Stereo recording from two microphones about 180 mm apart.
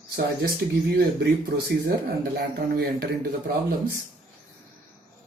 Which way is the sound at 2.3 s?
60° right (ahead or behind).